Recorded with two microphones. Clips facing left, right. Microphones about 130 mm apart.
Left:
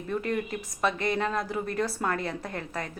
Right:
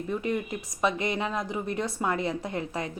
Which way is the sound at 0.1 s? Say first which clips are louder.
Left 1 dB; 10° right (ahead or behind).